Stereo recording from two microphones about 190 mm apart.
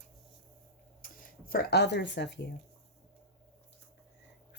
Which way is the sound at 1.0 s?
50° left (ahead or behind).